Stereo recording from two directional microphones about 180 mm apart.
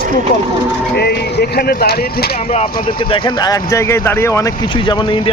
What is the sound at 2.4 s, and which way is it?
Speech, 35° left (ahead or behind).